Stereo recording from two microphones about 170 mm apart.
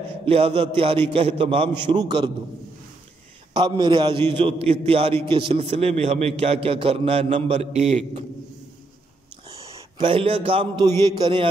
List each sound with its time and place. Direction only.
0.2 s a man's voice: 35° right (ahead or behind)
3.5 s a man's voice: 25° right (ahead or behind)
9.7 s a man's voice: 30° right (ahead or behind)